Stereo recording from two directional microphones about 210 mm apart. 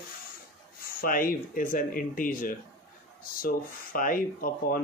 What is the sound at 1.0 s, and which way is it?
Speech, 40° left (ahead or behind).